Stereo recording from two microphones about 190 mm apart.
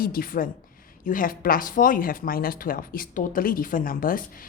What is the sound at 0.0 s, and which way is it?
Speech, 50° left (ahead or behind).